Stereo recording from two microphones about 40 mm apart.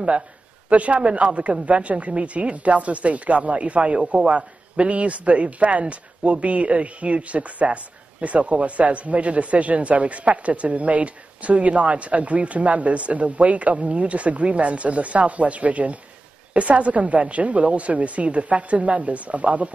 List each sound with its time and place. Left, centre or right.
0.7 s a man's voice: right